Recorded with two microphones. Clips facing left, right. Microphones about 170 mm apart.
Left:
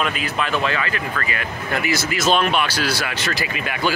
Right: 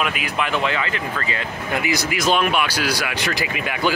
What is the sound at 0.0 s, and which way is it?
Speech, 15° right (ahead or behind).